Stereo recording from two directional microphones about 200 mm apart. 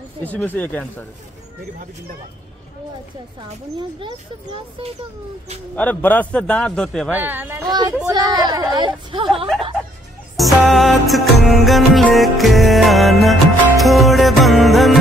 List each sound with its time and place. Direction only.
0.2 s speech: 10° left (ahead or behind)
4.0 s speech: 25° right (ahead or behind)
5.8 s a man's voice: 10° left (ahead or behind)
7.2 s a child's voice: 10° right (ahead or behind)
7.6 s speech: 20° right (ahead or behind)
10.3 s music: centre (ahead or behind)